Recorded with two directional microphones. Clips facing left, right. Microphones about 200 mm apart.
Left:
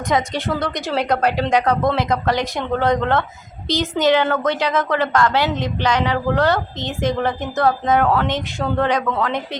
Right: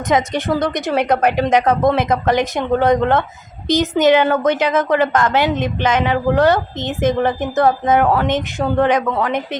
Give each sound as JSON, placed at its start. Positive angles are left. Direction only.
{"t": 0.1, "sound": "a woman's voice", "side_deg": -20}